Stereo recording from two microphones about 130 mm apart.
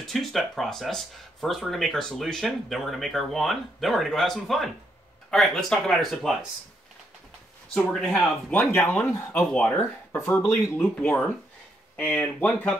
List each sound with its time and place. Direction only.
0.0 s speech: centre (ahead or behind)
7.7 s speech: 5° left (ahead or behind)
9.5 s speech: 5° left (ahead or behind)
10.1 s speech: 20° left (ahead or behind)